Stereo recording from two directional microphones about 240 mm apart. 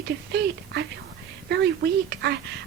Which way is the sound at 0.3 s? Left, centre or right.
Right.